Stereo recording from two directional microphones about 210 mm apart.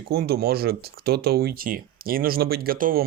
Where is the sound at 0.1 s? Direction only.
50° right (ahead or behind).